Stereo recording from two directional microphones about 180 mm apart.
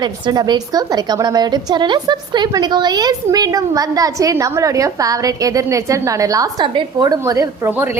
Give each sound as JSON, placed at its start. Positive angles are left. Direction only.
{"t": 0.0, "sound": "a woman's voice", "side_deg": -25}